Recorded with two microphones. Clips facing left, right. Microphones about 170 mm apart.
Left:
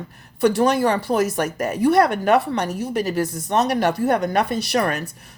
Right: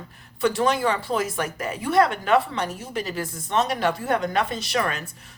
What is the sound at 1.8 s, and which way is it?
Speech, 60° left (ahead or behind).